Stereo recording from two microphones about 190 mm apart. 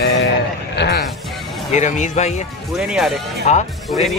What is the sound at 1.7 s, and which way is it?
Speech, 40° left (ahead or behind).